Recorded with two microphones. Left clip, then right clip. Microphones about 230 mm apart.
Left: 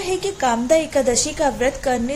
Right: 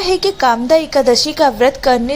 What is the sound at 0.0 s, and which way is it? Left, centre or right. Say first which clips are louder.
A woman's voice: right 7 dB; centre.